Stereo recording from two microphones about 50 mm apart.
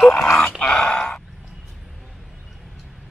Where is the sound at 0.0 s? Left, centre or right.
Centre.